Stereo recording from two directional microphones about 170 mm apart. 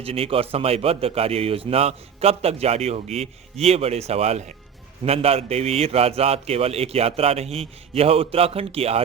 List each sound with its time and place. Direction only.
0.0 s speech: 35° right (ahead or behind)